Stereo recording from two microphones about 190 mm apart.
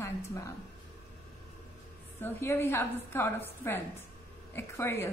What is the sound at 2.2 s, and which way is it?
A woman's voice, 10° left (ahead or behind).